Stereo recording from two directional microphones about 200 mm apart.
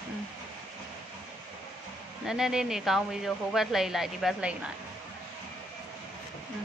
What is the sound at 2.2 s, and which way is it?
Speech, 5° right (ahead or behind).